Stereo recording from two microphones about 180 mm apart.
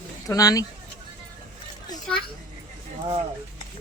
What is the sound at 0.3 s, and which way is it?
Speech, 20° left (ahead or behind).